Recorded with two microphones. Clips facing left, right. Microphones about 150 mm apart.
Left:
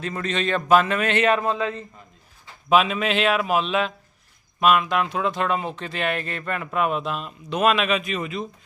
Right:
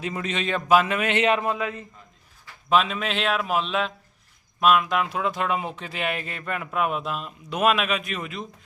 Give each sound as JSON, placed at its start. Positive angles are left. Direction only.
{"t": 0.0, "sound": "a man's voice", "side_deg": -10}
{"t": 1.5, "sound": "a man's voice", "side_deg": 25}
{"t": 2.6, "sound": "speech", "side_deg": 5}